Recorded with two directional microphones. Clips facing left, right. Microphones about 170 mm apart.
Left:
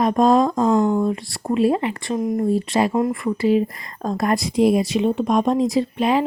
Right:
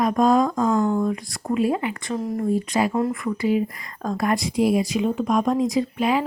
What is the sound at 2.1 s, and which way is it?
Speech, 15° left (ahead or behind).